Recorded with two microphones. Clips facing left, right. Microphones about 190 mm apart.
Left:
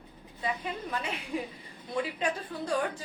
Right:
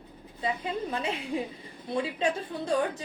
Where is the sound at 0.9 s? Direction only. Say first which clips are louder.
Right 3 dB; 25° right (ahead or behind).